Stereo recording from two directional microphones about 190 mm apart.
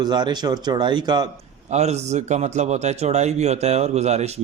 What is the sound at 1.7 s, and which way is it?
Speech, 35° right (ahead or behind).